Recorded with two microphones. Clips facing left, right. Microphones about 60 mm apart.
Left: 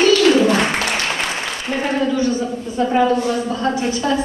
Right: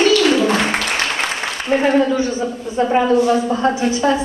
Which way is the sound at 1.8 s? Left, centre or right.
Right.